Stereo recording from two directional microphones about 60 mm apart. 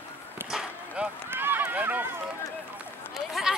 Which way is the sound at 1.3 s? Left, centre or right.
Right.